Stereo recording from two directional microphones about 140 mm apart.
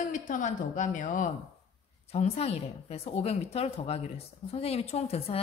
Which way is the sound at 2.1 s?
50° left (ahead or behind).